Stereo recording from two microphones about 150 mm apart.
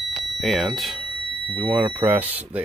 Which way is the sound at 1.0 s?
35° right (ahead or behind).